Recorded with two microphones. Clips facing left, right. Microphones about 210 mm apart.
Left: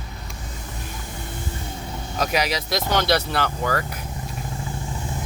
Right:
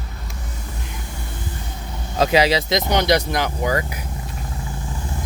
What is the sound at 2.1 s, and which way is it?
Speech, 25° right (ahead or behind).